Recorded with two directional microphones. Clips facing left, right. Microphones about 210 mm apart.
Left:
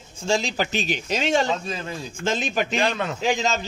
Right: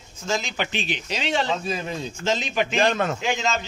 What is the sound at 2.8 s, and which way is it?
Speech, 45° right (ahead or behind).